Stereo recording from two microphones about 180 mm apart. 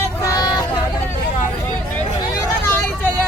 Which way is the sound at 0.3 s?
20° left (ahead or behind).